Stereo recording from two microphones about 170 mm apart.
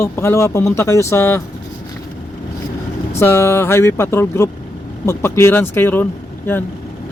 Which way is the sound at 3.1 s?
15° left (ahead or behind).